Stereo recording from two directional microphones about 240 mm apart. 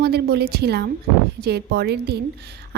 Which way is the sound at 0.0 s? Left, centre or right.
Right.